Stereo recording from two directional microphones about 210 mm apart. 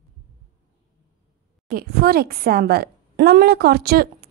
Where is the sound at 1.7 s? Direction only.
45° right (ahead or behind).